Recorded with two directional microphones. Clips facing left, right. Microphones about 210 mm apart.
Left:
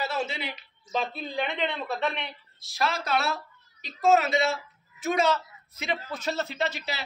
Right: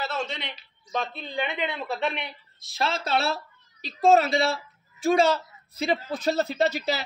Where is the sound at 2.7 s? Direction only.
25° right (ahead or behind).